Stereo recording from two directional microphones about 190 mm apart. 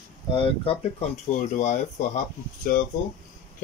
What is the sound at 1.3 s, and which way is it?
Speech, 40° left (ahead or behind).